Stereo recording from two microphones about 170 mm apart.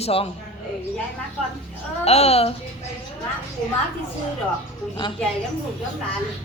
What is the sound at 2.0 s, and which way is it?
Speech, 35° left (ahead or behind).